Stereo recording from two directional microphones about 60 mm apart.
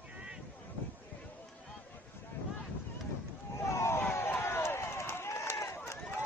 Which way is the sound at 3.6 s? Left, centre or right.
Left.